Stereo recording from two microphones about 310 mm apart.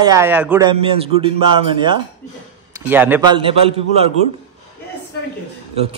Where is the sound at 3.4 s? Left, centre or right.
Centre.